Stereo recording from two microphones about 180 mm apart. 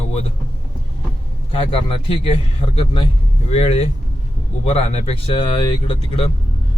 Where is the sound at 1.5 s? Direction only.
30° left (ahead or behind).